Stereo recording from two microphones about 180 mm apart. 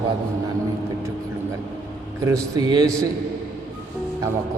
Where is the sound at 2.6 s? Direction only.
20° right (ahead or behind).